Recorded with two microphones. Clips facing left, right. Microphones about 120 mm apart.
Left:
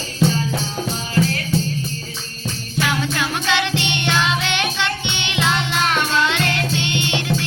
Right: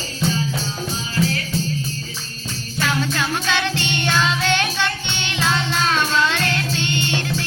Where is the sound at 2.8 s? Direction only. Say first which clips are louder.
Left 1 dB; 15° left (ahead or behind).